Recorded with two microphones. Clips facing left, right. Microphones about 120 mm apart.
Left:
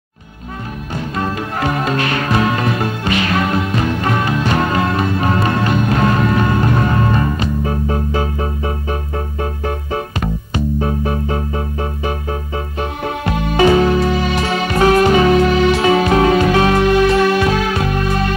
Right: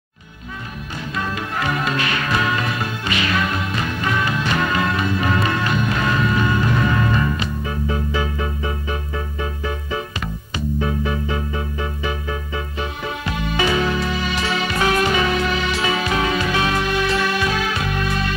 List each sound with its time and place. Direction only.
0.9 s music: 40° left (ahead or behind)